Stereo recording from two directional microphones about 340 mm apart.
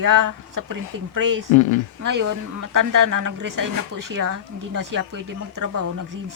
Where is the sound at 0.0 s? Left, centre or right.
Right.